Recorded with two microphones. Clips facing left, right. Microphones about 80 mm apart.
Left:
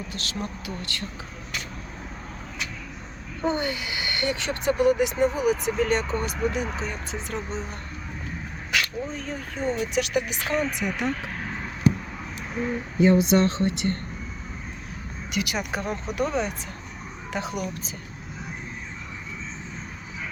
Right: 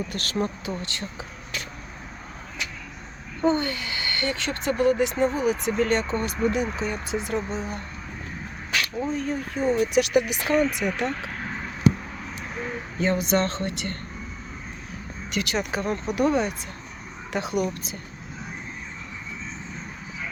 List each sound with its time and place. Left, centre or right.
0.1 s speech: right
3.4 s speech: centre
9.1 s speech: centre
13.0 s speech: centre
15.3 s speech: centre